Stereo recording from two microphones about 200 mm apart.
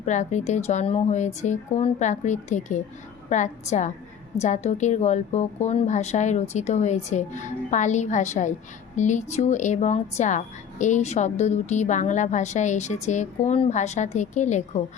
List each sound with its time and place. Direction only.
0.0 s speech: 35° left (ahead or behind)